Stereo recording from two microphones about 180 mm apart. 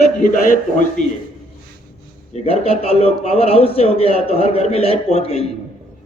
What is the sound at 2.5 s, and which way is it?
A man's voice, 35° left (ahead or behind).